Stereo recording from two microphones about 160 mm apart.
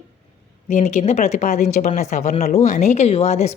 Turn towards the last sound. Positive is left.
turn(degrees=40)  # may be behind; listen again after turning